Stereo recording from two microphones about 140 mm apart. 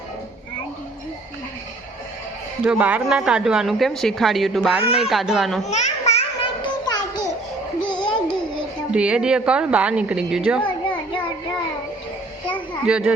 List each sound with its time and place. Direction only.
2.6 s a woman's voice: 10° right (ahead or behind)
5.6 s a sound: 55° left (ahead or behind)
7.8 s babbling: 30° left (ahead or behind)
8.9 s a woman's voice: 5° right (ahead or behind)
10.6 s a sound: 35° left (ahead or behind)
12.8 s a woman's voice: 5° right (ahead or behind)